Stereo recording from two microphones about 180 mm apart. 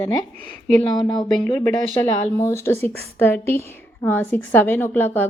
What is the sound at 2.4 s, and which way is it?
A woman's voice, 15° left (ahead or behind).